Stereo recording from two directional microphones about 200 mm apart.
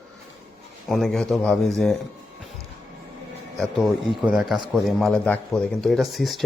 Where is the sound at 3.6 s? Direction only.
Centre (ahead or behind).